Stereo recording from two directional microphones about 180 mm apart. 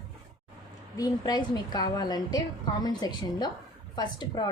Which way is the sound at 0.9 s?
20° left (ahead or behind).